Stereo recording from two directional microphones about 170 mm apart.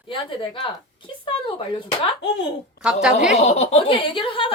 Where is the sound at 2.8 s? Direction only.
5° right (ahead or behind).